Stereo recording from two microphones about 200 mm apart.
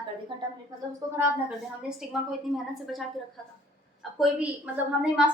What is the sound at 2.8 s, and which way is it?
Speech, centre (ahead or behind).